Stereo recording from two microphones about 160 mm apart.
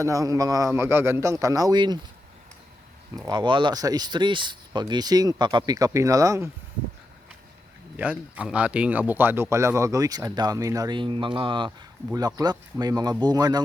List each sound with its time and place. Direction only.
0.0 s speech: 20° right (ahead or behind)
3.2 s speech: 25° right (ahead or behind)
7.9 s speech: 10° right (ahead or behind); by 13.6 s 25° right (ahead or behind)